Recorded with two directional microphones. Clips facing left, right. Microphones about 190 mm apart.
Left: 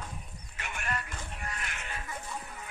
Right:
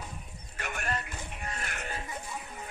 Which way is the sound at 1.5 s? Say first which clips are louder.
Right 3 dB; 45° right (ahead or behind).